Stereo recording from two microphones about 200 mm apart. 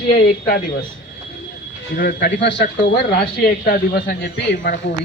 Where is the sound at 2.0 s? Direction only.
45° left (ahead or behind).